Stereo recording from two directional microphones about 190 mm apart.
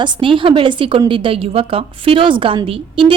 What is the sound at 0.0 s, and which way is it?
A woman's voice, 25° right (ahead or behind).